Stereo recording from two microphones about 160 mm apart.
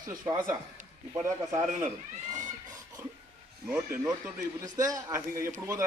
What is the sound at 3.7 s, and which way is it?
Speech, 10° right (ahead or behind).